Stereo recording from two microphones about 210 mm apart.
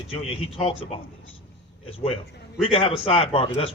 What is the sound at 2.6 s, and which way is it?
Speech, 25° left (ahead or behind).